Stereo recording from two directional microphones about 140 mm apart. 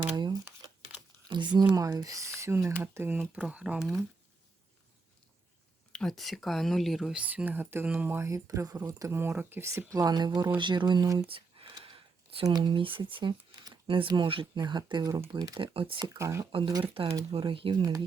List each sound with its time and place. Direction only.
1.3 s speech: 35° right (ahead or behind); by 3.8 s 10° right (ahead or behind)
5.9 s speech: 5° left (ahead or behind); by 11.3 s 25° right (ahead or behind)
11.3 s speech: 40° right (ahead or behind)
16.0 s speech: 20° right (ahead or behind)
16.5 s speech: 35° right (ahead or behind)